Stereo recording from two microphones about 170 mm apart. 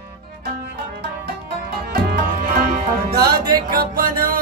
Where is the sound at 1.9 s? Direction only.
60° right (ahead or behind).